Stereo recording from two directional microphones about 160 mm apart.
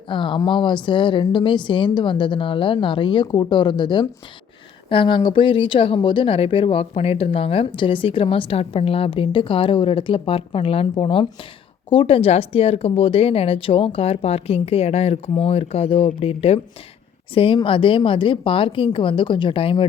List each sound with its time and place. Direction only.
0.1 s a woman's voice: 30° left (ahead or behind)